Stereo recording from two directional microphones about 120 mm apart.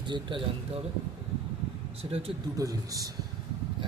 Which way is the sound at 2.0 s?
40° right (ahead or behind).